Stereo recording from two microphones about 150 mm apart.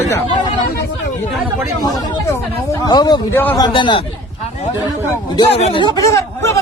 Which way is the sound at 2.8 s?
25° left (ahead or behind).